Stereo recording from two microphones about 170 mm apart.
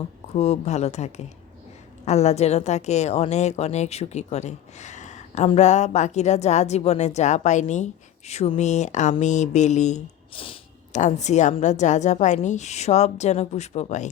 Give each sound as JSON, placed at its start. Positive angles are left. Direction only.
{"t": 0.3, "sound": "a woman's voice", "side_deg": 40}
{"t": 10.9, "sound": "a woman's voice", "side_deg": 45}